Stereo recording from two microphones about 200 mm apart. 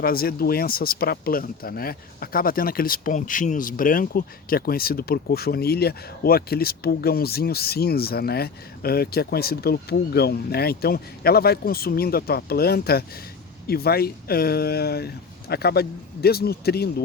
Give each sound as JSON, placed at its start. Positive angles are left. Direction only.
{"t": 0.0, "sound": "speech", "side_deg": 50}